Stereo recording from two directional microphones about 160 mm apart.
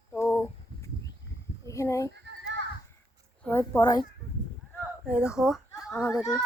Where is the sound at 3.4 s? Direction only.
15° left (ahead or behind).